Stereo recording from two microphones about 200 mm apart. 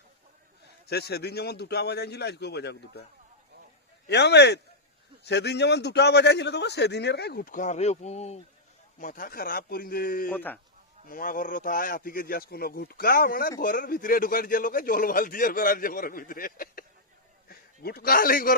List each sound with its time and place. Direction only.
0.9 s a man's voice: 55° left (ahead or behind)
4.0 s a man's voice: 55° left (ahead or behind)
10.3 s speech: 10° left (ahead or behind)
11.0 s a man's voice: 45° left (ahead or behind)